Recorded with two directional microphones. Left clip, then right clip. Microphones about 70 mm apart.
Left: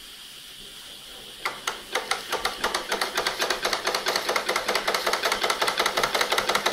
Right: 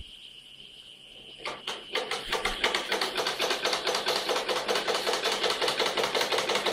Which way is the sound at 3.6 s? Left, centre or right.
Left.